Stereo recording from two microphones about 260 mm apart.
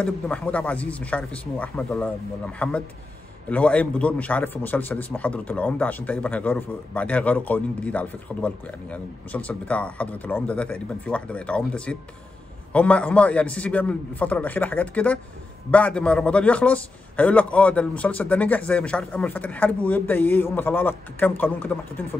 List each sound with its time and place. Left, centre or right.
0.0 s a man's voice: centre